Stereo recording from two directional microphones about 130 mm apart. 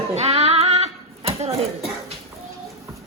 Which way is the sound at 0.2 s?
55° right (ahead or behind).